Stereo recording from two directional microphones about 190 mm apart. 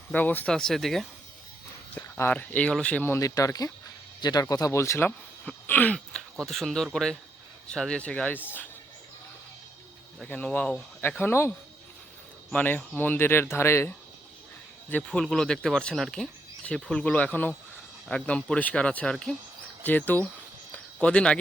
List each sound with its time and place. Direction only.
0.1 s speech: 10° left (ahead or behind)
2.0 s speech: 15° left (ahead or behind)
10.2 s speech: 10° left (ahead or behind)
20.7 s a sound: 5° left (ahead or behind)